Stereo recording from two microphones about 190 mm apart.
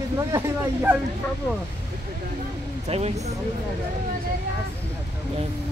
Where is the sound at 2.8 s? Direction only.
35° right (ahead or behind).